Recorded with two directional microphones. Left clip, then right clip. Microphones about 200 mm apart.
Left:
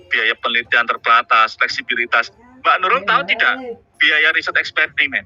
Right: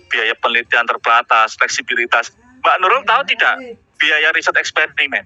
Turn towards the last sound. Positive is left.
turn(degrees=-45)  # may be behind; listen again after turning